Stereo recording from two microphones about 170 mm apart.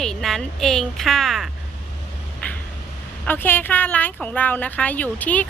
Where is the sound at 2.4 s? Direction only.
10° left (ahead or behind).